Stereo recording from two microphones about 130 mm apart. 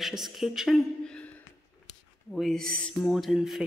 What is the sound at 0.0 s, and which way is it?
A woman's voice, centre (ahead or behind).